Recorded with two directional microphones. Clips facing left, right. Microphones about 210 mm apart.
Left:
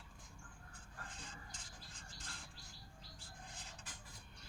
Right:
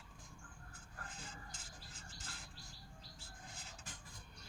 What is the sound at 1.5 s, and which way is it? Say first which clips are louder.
Music: right 1 dB; 5° right (ahead or behind).